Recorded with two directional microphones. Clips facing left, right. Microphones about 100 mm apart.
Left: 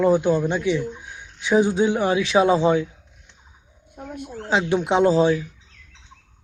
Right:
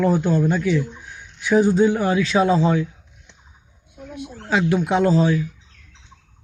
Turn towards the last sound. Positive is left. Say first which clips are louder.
# left 1 dB
turn(degrees=25)  # may be behind; listen again after turning